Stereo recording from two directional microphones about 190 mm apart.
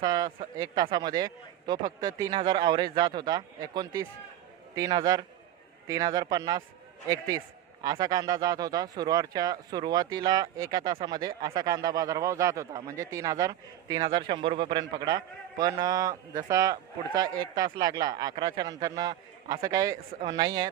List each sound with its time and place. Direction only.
0.0 s a man's voice: 20° right (ahead or behind)